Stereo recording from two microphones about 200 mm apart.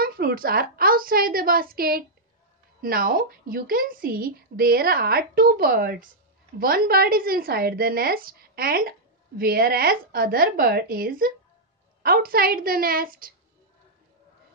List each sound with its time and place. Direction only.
0.0 s a woman's voice: 50° right (ahead or behind)